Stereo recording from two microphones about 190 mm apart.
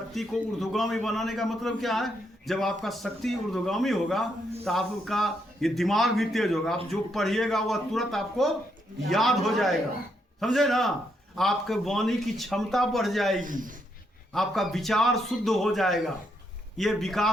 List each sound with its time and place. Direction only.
0.1 s a man's voice: centre (ahead or behind)
13.4 s speech: 45° right (ahead or behind)
14.3 s a man's voice: centre (ahead or behind)